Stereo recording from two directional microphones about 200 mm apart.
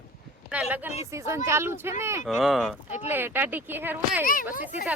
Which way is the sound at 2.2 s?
Centre (ahead or behind).